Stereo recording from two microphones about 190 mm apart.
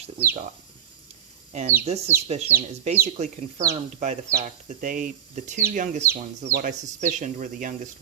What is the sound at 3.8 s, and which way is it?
Speech, 35° right (ahead or behind).